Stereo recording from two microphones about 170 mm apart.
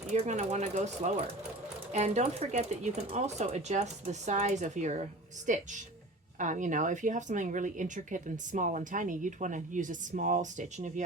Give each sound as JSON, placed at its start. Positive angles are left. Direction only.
{"t": 0.1, "sound": "speech", "side_deg": -40}